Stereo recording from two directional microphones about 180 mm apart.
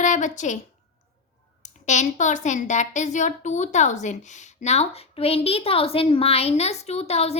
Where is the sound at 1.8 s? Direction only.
40° left (ahead or behind).